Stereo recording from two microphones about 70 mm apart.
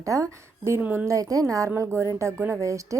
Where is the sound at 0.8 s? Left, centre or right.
Right.